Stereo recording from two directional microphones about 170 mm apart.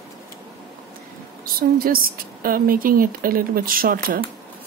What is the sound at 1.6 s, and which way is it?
Speech, 55° right (ahead or behind).